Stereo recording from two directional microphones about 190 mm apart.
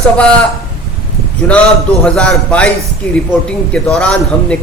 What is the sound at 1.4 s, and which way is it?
A man's voice, 10° left (ahead or behind).